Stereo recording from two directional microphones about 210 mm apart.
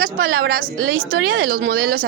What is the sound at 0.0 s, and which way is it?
A woman's voice, 45° right (ahead or behind).